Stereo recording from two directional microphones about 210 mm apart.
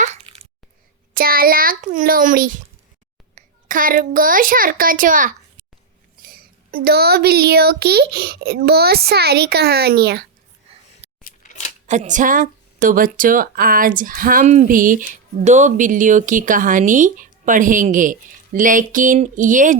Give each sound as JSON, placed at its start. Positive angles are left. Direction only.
{"t": 0.0, "sound": "babbling", "side_deg": -30}
{"t": 1.1, "sound": "a child's voice", "side_deg": -45}
{"t": 11.9, "sound": "speech", "side_deg": -35}